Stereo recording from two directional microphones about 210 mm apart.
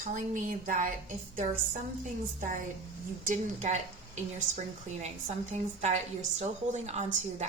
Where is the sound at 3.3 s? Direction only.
35° right (ahead or behind).